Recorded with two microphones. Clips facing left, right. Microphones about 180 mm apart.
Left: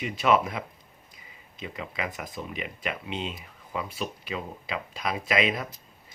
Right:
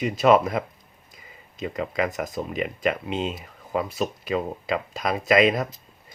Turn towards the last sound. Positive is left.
turn(degrees=-45)  # may be behind; listen again after turning